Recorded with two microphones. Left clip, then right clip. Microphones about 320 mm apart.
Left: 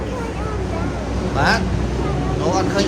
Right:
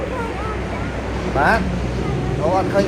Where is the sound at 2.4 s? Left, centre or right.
Centre.